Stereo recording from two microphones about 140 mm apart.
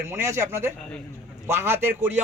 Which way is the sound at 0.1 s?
15° right (ahead or behind).